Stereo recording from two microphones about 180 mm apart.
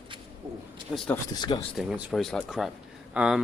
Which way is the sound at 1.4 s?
25° left (ahead or behind).